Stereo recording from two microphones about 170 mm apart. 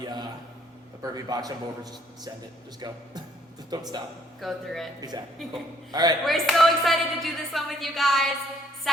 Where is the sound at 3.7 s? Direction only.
20° right (ahead or behind).